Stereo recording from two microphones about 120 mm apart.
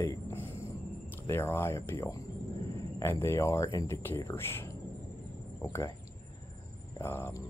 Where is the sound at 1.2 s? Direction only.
20° left (ahead or behind).